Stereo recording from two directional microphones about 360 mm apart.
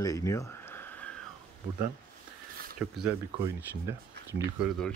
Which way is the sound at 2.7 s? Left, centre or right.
Centre.